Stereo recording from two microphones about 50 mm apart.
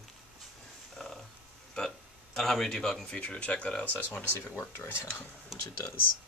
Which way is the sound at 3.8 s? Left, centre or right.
Left.